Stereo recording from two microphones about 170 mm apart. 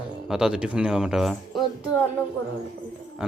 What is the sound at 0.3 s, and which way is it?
Speech, 5° right (ahead or behind).